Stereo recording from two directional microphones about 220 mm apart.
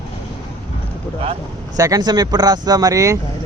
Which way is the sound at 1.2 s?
25° right (ahead or behind).